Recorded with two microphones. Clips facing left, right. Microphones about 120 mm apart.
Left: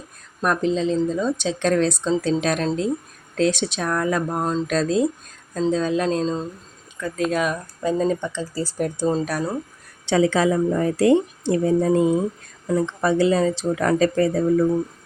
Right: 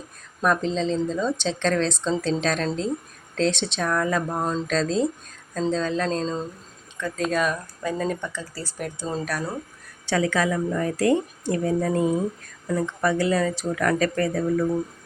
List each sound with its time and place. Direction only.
0.4 s a woman's voice: 5° left (ahead or behind)
7.8 s speech: 20° left (ahead or behind)
8.8 s speech: 40° left (ahead or behind)
9.1 s speech: 25° left (ahead or behind)